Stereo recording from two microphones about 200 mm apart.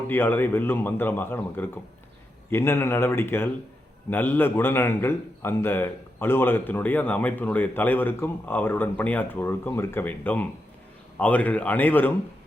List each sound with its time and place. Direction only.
0.1 s a man's voice: 10° left (ahead or behind)